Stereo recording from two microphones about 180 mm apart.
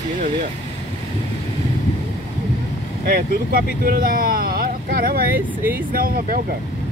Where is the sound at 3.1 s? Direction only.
55° right (ahead or behind).